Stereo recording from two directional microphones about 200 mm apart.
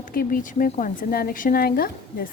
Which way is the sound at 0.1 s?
45° left (ahead or behind).